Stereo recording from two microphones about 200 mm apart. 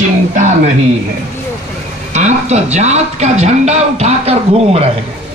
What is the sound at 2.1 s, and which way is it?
Speech, 35° right (ahead or behind).